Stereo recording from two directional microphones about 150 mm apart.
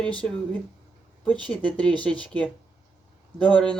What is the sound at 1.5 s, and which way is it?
Speech, 10° left (ahead or behind).